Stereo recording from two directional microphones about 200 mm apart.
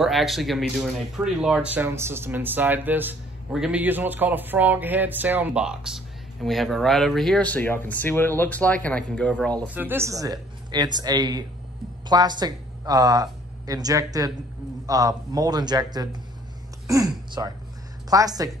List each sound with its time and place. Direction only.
0.0 s speech: centre (ahead or behind)
9.8 s a woman's voice: 10° right (ahead or behind)